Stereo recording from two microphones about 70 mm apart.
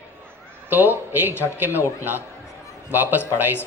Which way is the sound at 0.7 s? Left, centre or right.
Right.